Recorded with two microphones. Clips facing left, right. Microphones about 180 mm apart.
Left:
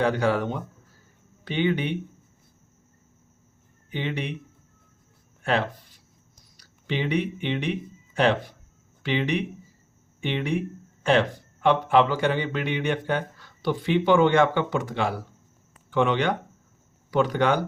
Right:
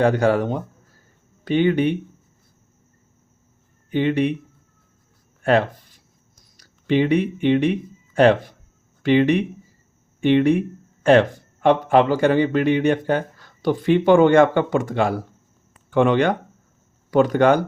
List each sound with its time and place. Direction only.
0.0 s speech: 45° right (ahead or behind)
3.9 s speech: 50° right (ahead or behind)
5.4 s a sound: 50° right (ahead or behind)
6.6 s speech: 50° right (ahead or behind)